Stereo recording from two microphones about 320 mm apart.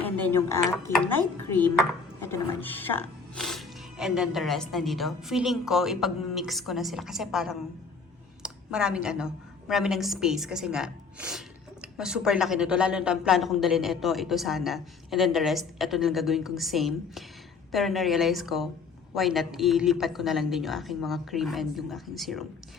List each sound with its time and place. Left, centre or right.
0.0 s a woman's voice: centre